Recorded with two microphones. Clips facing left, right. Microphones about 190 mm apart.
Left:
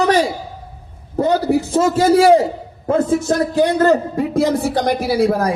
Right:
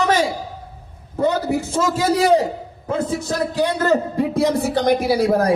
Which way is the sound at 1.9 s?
55° left (ahead or behind).